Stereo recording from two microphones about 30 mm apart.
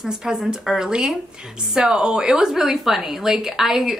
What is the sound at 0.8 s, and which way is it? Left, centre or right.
A woman's voice, right.